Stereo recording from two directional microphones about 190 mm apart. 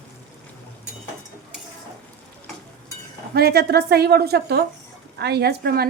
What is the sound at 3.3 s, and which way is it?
A woman's voice, 55° right (ahead or behind).